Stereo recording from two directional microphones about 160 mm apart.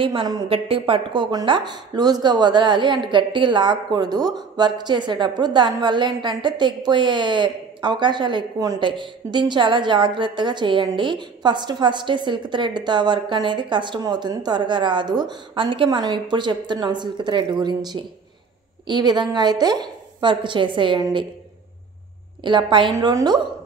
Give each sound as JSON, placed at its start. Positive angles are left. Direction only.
{"t": 0.0, "sound": "a woman's voice", "side_deg": -30}
{"t": 22.4, "sound": "a woman's voice", "side_deg": -30}